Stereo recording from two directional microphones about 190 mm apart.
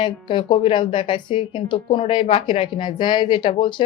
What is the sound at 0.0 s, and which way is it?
A woman's voice, 25° left (ahead or behind).